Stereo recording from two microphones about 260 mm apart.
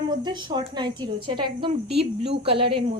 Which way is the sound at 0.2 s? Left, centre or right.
Centre.